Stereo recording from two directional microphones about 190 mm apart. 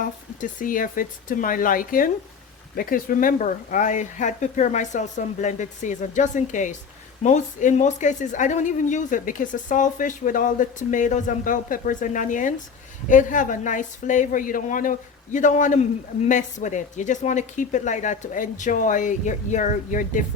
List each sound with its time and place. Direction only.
0.0 s a woman's voice: 45° left (ahead or behind)